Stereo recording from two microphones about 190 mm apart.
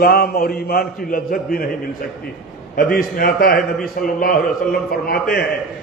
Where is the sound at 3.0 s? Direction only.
50° left (ahead or behind).